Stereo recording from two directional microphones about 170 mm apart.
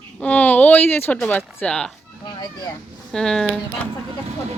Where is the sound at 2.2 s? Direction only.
25° left (ahead or behind).